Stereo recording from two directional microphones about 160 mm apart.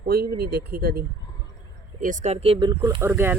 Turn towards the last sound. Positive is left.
turn(degrees=-15)  # may be behind; listen again after turning